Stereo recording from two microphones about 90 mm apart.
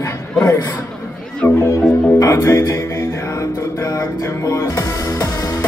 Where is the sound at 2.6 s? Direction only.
30° left (ahead or behind).